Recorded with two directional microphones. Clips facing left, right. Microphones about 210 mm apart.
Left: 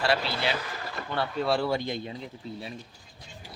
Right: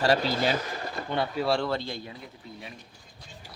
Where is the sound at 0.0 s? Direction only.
40° right (ahead or behind).